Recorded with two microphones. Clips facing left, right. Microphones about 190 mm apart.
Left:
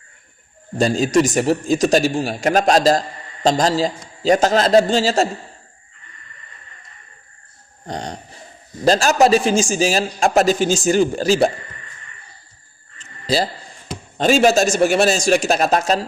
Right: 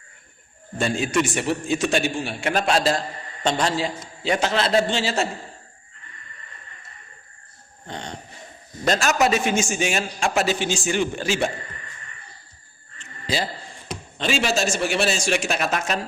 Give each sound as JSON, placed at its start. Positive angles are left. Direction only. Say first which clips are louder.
{"t": 0.8, "sound": "a man's voice", "louder": "left 6 dB", "side_deg": 35}
{"t": 7.9, "sound": "a sound", "louder": "left 6 dB", "side_deg": 40}
{"t": 8.8, "sound": "a man's voice", "louder": "left 6 dB", "side_deg": 35}
{"t": 13.2, "sound": "a man's voice", "louder": "left 6 dB", "side_deg": 35}